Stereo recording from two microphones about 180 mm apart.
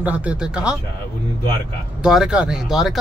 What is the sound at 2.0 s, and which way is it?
Speech, 5° right (ahead or behind).